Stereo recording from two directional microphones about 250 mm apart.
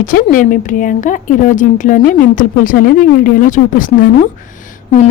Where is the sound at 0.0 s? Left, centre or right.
Left.